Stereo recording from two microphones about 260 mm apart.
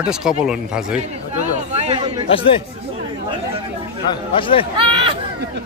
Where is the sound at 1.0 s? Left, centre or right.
Right.